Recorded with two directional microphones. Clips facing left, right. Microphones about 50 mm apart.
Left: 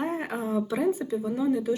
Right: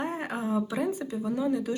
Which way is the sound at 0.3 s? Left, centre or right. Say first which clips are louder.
Left 1 dB; right.